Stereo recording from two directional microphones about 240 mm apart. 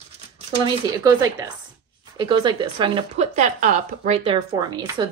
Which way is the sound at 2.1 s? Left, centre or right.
Centre.